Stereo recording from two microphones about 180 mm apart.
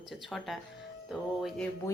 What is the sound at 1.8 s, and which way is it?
Speech, 15° left (ahead or behind).